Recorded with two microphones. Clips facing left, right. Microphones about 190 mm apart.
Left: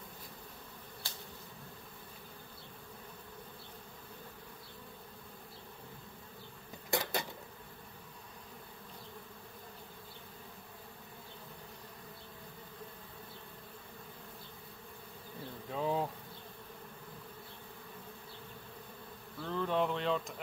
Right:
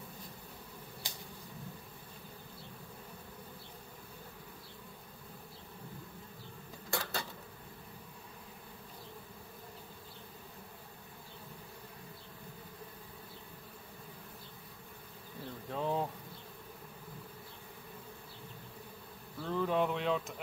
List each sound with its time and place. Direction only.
1.0 s insect: 15° right (ahead or behind)
6.9 s a sound: 20° left (ahead or behind)
15.7 s insect: centre (ahead or behind)
19.4 s speech: 5° right (ahead or behind)